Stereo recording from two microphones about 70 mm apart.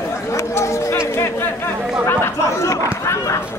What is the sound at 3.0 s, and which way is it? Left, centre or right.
Chatter, left.